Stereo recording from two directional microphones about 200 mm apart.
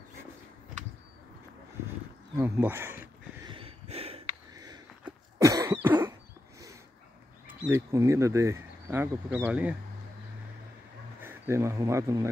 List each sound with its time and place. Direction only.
2.3 s speech: 10° right (ahead or behind)
3.4 s a sound: 25° right (ahead or behind)
5.4 s cough: 15° right (ahead or behind)
7.4 s speech: 10° right (ahead or behind)
11.1 s speech: 10° right (ahead or behind)